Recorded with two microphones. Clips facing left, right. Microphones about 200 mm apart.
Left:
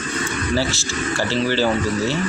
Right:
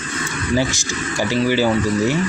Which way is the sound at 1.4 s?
10° right (ahead or behind).